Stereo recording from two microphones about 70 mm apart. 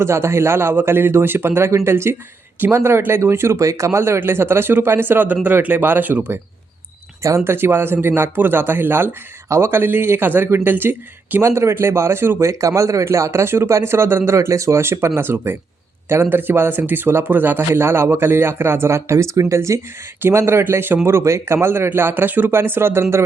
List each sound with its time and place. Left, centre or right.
0.0 s speech: right
7.2 s speech: right
11.3 s speech: right
12.5 s speech: right
20.2 s speech: right